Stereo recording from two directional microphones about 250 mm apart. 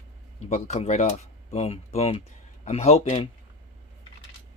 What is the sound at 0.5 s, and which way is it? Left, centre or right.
Speech, left.